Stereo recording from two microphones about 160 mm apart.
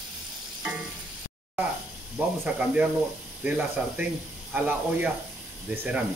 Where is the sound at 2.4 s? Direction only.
10° right (ahead or behind).